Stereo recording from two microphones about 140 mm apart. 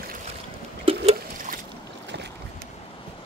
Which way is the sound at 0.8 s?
40° right (ahead or behind).